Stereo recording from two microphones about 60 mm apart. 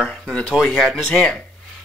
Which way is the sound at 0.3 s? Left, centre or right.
Centre.